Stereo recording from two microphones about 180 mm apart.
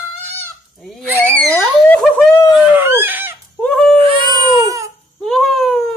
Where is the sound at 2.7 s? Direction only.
10° right (ahead or behind).